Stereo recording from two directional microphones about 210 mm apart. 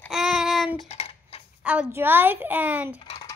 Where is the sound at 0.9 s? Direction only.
30° left (ahead or behind).